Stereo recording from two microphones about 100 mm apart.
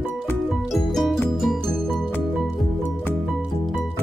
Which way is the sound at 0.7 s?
Centre (ahead or behind).